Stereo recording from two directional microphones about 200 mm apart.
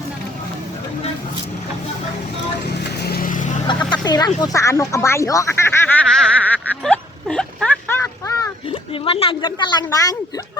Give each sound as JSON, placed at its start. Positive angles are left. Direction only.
{"t": 2.6, "sound": "vehicle", "side_deg": 55}
{"t": 3.7, "sound": "a sound", "side_deg": 20}
{"t": 8.9, "sound": "speech", "side_deg": 30}